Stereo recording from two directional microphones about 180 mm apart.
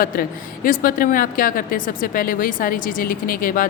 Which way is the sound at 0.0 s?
50° left (ahead or behind).